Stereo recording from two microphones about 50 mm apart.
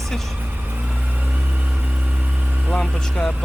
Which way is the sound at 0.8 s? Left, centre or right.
Right.